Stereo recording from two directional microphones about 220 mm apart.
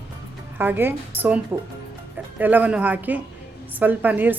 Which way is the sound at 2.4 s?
10° right (ahead or behind).